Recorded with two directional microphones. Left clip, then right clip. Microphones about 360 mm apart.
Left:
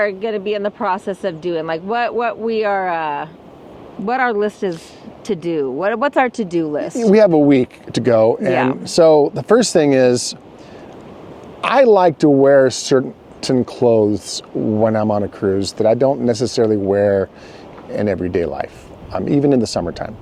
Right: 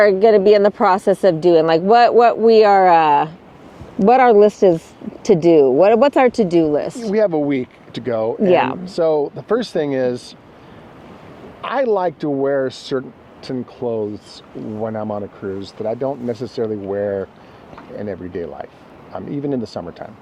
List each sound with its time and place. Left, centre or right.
0.0 s a woman's voice: right
7.1 s speech: left
8.4 s a woman's voice: right
9.0 s speech: left
11.6 s speech: left